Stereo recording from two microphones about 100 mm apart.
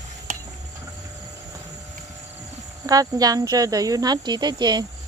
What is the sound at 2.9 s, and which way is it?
Speech, 40° right (ahead or behind).